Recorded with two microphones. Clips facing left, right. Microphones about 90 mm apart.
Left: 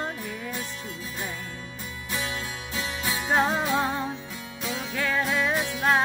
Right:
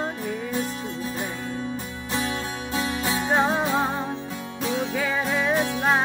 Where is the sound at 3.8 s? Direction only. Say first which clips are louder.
Right 1 dB; 5° right (ahead or behind).